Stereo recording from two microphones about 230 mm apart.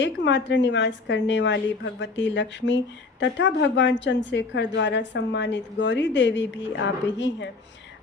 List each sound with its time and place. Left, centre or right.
0.0 s a woman's voice: left